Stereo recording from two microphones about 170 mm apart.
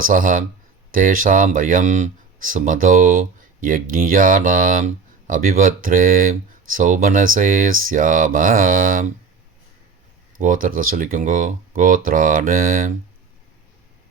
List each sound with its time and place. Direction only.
0.1 s speech: 55° right (ahead or behind)
10.4 s speech: 55° right (ahead or behind)